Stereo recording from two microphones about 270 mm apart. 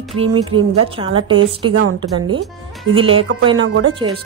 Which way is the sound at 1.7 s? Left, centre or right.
Right.